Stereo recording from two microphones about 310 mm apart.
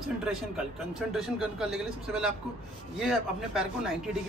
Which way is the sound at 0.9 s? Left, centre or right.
Centre.